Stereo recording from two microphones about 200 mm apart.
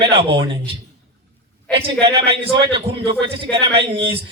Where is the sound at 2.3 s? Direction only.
25° right (ahead or behind).